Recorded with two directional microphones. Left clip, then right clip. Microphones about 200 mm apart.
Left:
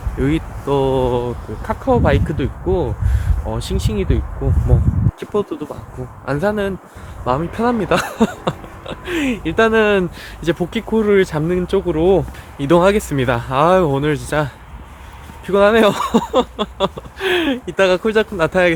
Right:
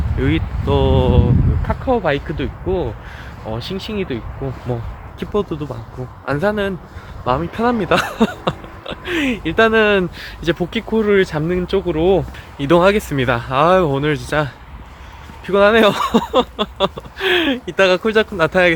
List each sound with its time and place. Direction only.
0.2 s speech: 10° left (ahead or behind)